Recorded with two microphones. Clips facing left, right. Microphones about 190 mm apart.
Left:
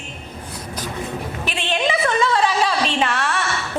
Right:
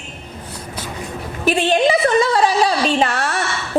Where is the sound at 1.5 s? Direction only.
40° right (ahead or behind).